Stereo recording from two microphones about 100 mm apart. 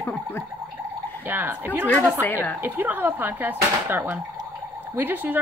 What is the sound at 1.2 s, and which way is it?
Speech, 20° right (ahead or behind).